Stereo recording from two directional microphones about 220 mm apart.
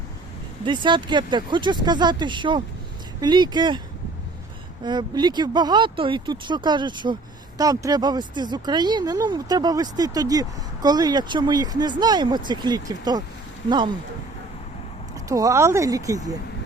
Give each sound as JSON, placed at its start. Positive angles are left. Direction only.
{"t": 0.6, "sound": "speech", "side_deg": -20}
{"t": 4.8, "sound": "speech", "side_deg": -20}
{"t": 15.3, "sound": "speech", "side_deg": -15}